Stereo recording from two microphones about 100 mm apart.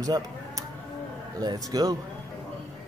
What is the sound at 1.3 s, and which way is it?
Speech, 40° right (ahead or behind).